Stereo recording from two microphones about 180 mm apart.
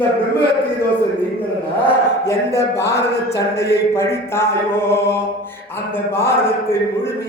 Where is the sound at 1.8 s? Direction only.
15° left (ahead or behind).